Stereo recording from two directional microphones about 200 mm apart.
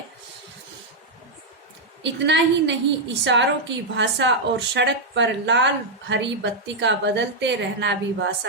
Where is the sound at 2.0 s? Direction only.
60° right (ahead or behind).